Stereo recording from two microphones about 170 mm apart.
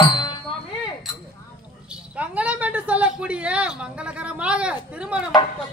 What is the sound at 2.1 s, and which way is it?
A woman's voice, 10° right (ahead or behind).